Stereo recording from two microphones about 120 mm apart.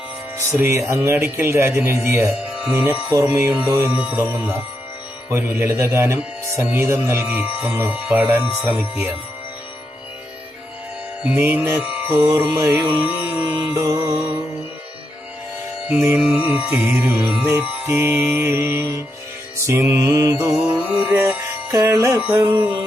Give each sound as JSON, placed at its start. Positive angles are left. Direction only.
{"t": 0.6, "sound": "speech", "side_deg": -20}
{"t": 2.3, "sound": "music", "side_deg": -5}
{"t": 2.7, "sound": "speech", "side_deg": -20}
{"t": 3.7, "sound": "music", "side_deg": -20}
{"t": 5.3, "sound": "speech", "side_deg": -20}
{"t": 7.3, "sound": "music", "side_deg": -10}
{"t": 11.2, "sound": "music", "side_deg": -15}
{"t": 13.8, "sound": "music", "side_deg": -25}
{"t": 15.9, "sound": "music", "side_deg": -10}
{"t": 17.5, "sound": "speech", "side_deg": -20}
{"t": 20.0, "sound": "speech", "side_deg": -30}
{"t": 21.0, "sound": "music", "side_deg": -15}
{"t": 21.7, "sound": "speech", "side_deg": -25}